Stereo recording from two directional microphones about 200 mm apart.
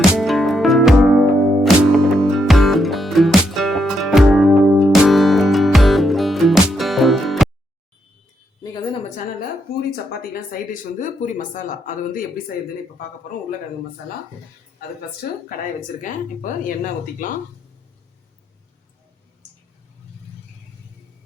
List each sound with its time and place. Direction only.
0.1 s music: centre (ahead or behind)
11.0 s speech: 40° left (ahead or behind)
14.8 s speech: 50° left (ahead or behind)